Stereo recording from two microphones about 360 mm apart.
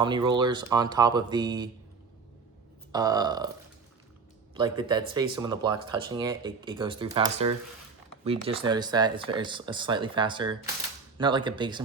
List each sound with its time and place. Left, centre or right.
0.0 s speech: centre
2.9 s speech: centre
4.5 s speech: centre